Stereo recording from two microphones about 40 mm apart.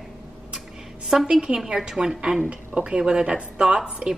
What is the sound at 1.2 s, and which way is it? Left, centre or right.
Speech, right.